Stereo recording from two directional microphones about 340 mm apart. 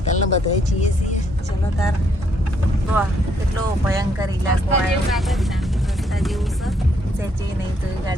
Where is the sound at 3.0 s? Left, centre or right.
Centre.